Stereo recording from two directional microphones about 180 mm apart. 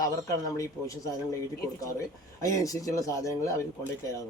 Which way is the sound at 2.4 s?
20° left (ahead or behind).